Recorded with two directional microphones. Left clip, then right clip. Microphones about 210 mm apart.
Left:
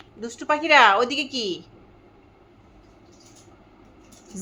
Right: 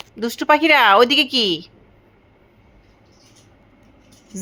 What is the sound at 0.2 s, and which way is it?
A woman's voice, 40° right (ahead or behind).